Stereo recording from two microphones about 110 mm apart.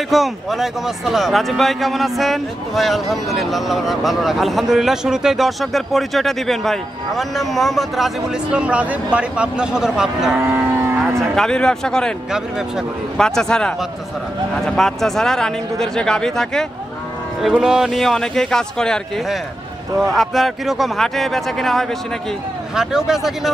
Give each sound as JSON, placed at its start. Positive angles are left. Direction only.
{"t": 0.1, "sound": "speech", "side_deg": 0}
{"t": 10.4, "sound": "cattle", "side_deg": -20}
{"t": 11.3, "sound": "speech", "side_deg": 5}
{"t": 12.3, "sound": "speech", "side_deg": -5}